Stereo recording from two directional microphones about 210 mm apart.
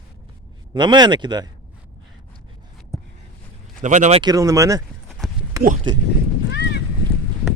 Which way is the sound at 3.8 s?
35° right (ahead or behind).